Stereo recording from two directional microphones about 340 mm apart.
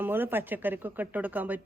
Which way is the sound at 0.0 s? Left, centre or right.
Centre.